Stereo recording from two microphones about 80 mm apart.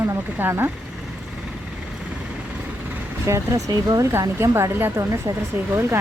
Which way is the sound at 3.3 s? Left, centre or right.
Right.